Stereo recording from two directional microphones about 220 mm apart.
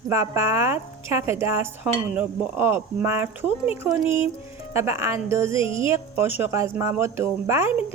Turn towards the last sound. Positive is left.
turn(degrees=-10)  # may be behind; listen again after turning